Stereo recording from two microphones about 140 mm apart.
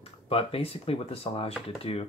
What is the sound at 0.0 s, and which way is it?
Speech, 45° left (ahead or behind).